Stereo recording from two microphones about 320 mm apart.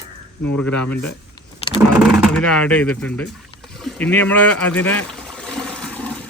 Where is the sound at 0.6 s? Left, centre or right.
Centre.